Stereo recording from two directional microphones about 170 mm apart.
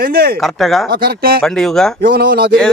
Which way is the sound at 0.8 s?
65° right (ahead or behind).